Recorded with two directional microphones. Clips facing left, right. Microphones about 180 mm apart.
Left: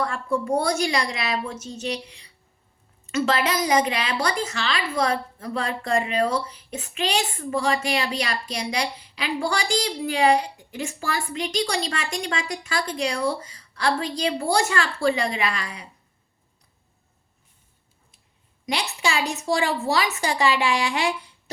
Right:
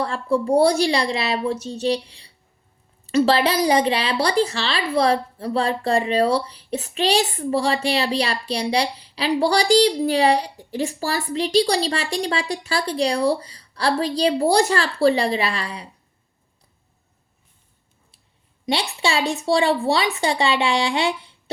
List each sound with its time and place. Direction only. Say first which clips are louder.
0.0 s a woman's voice: right 4 dB; 30° right (ahead or behind)
18.6 s a woman's voice: right 3 dB; 30° right (ahead or behind)